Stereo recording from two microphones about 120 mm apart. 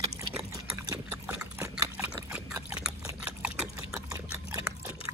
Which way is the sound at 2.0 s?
10° right (ahead or behind).